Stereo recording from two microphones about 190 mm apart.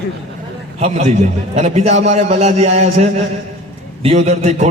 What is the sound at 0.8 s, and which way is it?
A man's voice, 35° right (ahead or behind).